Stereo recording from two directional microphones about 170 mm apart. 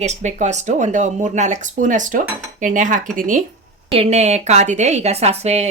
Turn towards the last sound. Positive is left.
turn(degrees=-40)  # may be behind; listen again after turning